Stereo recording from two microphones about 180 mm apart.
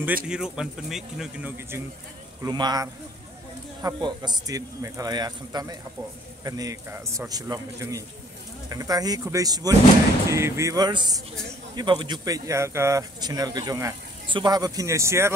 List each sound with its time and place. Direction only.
0.0 s speech: 5° right (ahead or behind)
2.4 s speech: 20° right (ahead or behind)